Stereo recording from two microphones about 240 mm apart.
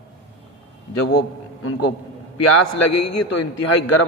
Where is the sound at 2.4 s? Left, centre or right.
Left.